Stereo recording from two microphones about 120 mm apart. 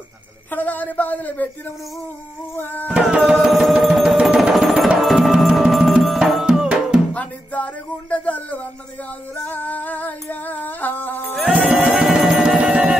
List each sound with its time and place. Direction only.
0.5 s speech: 15° left (ahead or behind)
2.5 s speech: 15° left (ahead or behind)
3.0 s music: centre (ahead or behind)
7.2 s music: 10° left (ahead or behind)
9.4 s singing: 15° left (ahead or behind)
10.4 s music: 15° left (ahead or behind)
11.5 s music: 10° right (ahead or behind)